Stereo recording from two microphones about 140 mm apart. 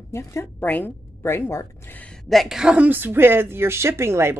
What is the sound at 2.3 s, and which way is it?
Speech, centre (ahead or behind).